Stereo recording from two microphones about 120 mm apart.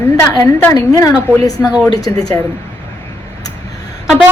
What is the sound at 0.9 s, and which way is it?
A woman's voice, 30° left (ahead or behind).